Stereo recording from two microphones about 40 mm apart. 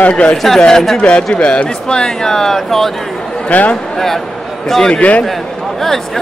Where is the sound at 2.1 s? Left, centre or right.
Centre.